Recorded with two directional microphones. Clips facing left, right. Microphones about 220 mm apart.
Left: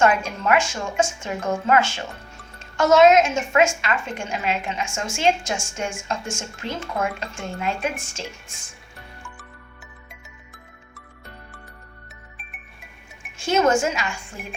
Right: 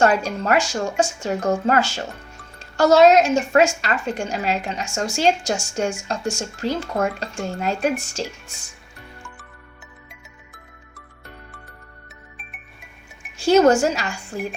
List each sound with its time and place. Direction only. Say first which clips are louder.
0.0 s speech: right 2 dB; 35° right (ahead or behind)
10.1 s music: even; centre (ahead or behind)
12.0 s music: right 2 dB; centre (ahead or behind)
13.4 s speech: right 5 dB; 35° right (ahead or behind)